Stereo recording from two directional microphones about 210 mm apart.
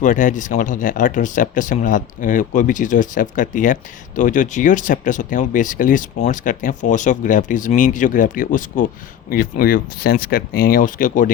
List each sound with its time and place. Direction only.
0.0 s speech: 40° left (ahead or behind)